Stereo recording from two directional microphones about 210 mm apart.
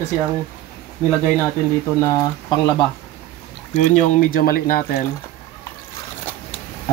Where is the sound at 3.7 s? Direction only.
35° left (ahead or behind).